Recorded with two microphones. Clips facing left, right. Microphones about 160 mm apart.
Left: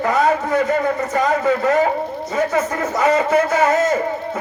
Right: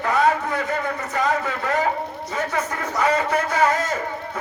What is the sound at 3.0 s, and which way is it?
Speech, 25° left (ahead or behind).